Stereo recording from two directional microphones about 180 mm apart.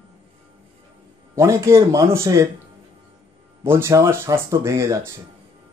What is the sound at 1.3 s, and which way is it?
A man's voice, 15° right (ahead or behind).